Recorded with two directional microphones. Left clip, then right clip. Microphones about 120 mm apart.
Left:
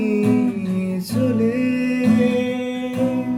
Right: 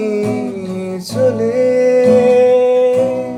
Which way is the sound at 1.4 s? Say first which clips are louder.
Right 9 dB; 20° left (ahead or behind).